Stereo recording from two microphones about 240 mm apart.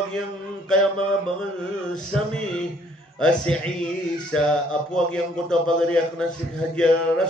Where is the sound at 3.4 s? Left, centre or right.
Centre.